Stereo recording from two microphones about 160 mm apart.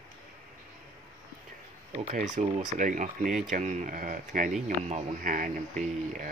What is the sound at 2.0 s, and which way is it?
Speech, 50° right (ahead or behind).